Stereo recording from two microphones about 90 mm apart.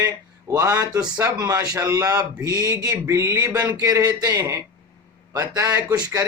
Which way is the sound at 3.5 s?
45° right (ahead or behind).